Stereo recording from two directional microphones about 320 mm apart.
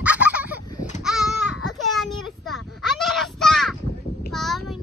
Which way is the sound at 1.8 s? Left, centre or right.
Centre.